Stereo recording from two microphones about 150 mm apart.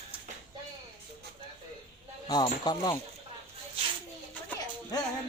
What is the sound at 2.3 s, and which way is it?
Speech, 30° left (ahead or behind).